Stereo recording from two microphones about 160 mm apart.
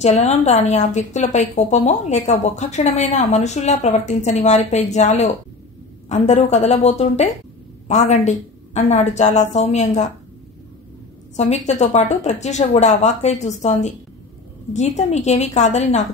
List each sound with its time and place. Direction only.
0.0 s a woman's voice: 45° left (ahead or behind)
11.3 s a woman's voice: 45° left (ahead or behind)